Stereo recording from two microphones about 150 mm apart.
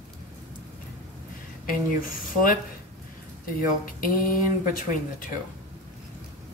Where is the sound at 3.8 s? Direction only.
70° left (ahead or behind).